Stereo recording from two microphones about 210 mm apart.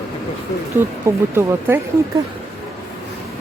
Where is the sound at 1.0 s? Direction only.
15° right (ahead or behind).